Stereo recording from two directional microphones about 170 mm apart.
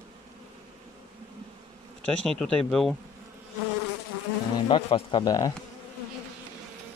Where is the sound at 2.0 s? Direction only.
5° left (ahead or behind).